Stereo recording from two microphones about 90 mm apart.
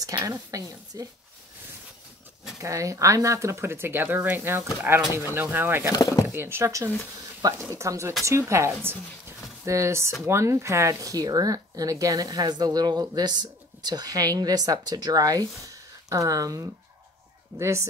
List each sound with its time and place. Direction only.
0.1 s speech: 35° right (ahead or behind)
2.6 s speech: 35° right (ahead or behind)
5.9 s speech: 40° left (ahead or behind)
6.2 s speech: 25° right (ahead or behind)